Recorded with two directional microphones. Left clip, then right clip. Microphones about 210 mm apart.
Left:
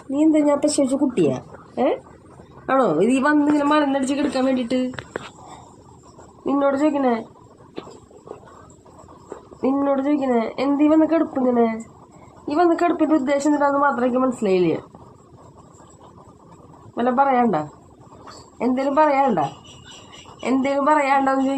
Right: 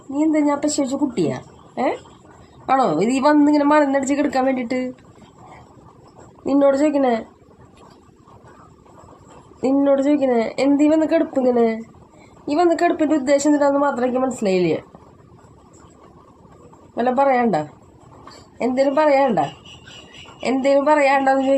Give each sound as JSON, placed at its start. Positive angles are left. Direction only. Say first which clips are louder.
{"t": 0.2, "sound": "a woman's voice", "louder": "left 1 dB", "side_deg": -15}
{"t": 2.6, "sound": "a woman's voice", "louder": "right 1 dB", "side_deg": -35}
{"t": 6.4, "sound": "a woman's voice", "louder": "right 3 dB", "side_deg": -45}
{"t": 9.6, "sound": "a woman's voice", "louder": "right 4 dB", "side_deg": -45}
{"t": 16.9, "sound": "a woman's voice", "louder": "right 1 dB", "side_deg": -40}